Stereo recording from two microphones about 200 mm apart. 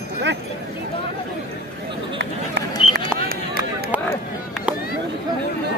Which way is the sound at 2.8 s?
25° left (ahead or behind).